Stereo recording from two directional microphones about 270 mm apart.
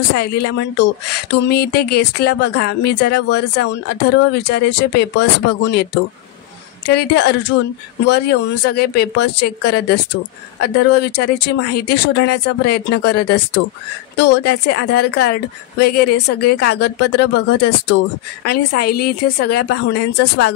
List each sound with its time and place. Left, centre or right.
0.1 s speech: left
6.9 s speech: left